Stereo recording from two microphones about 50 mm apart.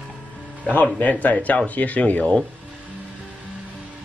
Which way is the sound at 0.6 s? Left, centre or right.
Left.